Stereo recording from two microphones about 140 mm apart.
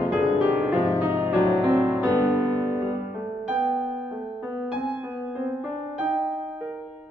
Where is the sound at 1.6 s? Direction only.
30° right (ahead or behind).